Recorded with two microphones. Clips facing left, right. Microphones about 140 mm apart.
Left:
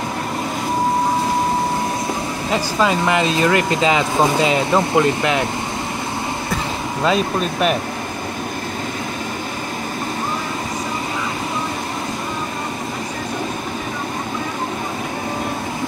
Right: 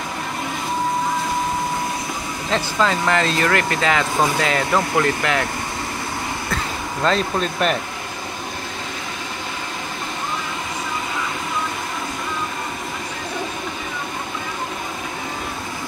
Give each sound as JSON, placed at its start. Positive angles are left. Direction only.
{"t": 2.5, "sound": "speech", "side_deg": 15}
{"t": 6.5, "sound": "speech", "side_deg": 10}